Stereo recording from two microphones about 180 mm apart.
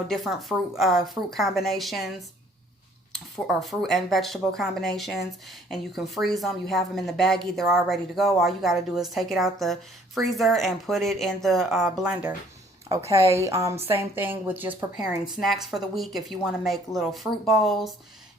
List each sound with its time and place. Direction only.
0.1 s a woman's voice: centre (ahead or behind)
12.9 s a woman's voice: 15° right (ahead or behind); by 17.9 s centre (ahead or behind)